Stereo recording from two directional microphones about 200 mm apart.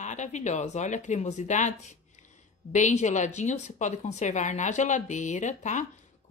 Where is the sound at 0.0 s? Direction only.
35° left (ahead or behind).